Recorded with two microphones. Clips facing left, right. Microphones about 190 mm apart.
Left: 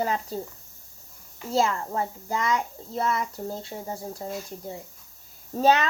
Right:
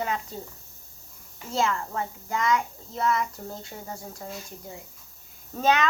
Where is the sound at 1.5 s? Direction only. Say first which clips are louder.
Left 2 dB; 35° left (ahead or behind).